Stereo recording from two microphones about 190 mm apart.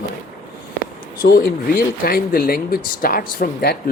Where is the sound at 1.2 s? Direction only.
50° left (ahead or behind).